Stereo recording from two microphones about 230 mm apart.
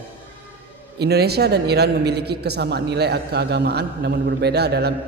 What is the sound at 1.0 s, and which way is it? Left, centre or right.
Speech, right.